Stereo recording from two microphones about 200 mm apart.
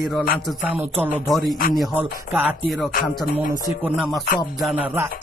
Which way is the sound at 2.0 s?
10° right (ahead or behind).